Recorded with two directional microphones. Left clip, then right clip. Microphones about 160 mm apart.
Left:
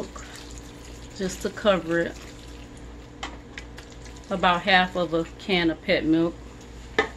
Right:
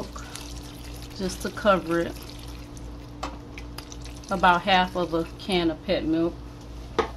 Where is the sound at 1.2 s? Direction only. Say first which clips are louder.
Left 1 dB; 10° left (ahead or behind).